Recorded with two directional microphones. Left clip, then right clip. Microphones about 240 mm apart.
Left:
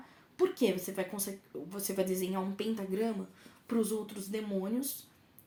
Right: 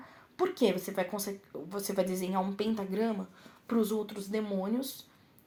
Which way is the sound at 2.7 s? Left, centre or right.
Right.